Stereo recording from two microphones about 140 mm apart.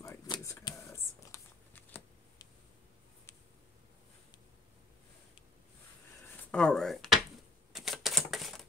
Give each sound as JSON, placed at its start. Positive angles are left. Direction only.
{"t": 0.0, "sound": "a sound", "side_deg": 20}
{"t": 0.7, "sound": "shuffling cards", "side_deg": 20}
{"t": 6.5, "sound": "speech", "side_deg": 5}
{"t": 7.7, "sound": "typewriter", "side_deg": 0}